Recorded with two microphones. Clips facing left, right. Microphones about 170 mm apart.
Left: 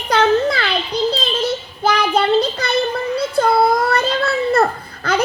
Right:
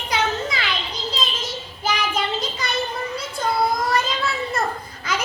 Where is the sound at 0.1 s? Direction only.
65° left (ahead or behind).